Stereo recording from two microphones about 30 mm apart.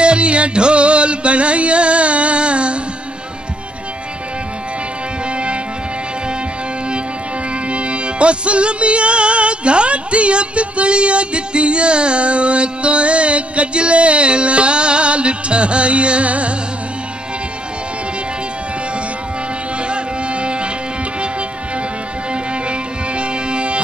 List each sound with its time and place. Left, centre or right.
0.0 s music: right
7.7 s music: right
19.9 s music: right
22.3 s music: right